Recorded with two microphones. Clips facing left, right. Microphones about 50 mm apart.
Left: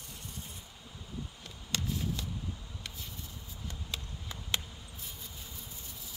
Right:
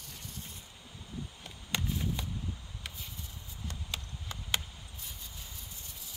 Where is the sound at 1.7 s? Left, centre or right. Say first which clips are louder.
Right 1 dB; centre.